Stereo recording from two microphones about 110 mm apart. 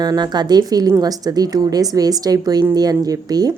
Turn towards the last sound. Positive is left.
turn(degrees=-35)  # may be behind; listen again after turning